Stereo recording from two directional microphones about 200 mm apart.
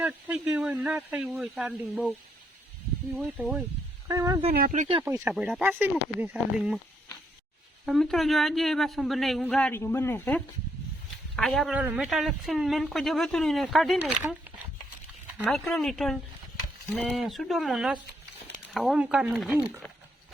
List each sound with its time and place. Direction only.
0.0 s speech: 5° right (ahead or behind)
3.3 s a woman's voice: centre (ahead or behind)
4.1 s speech: 15° right (ahead or behind)
4.5 s speech: 45° right (ahead or behind)
5.0 s speech: 10° right (ahead or behind)
7.9 s a woman's voice: centre (ahead or behind)